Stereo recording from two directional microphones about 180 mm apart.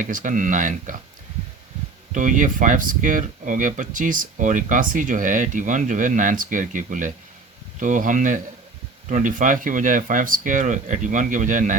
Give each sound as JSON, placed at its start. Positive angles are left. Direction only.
{"t": 0.0, "sound": "speech", "side_deg": -45}
{"t": 2.1, "sound": "speech", "side_deg": -45}